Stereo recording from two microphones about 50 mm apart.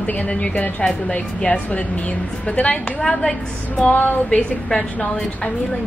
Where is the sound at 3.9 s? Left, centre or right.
Left.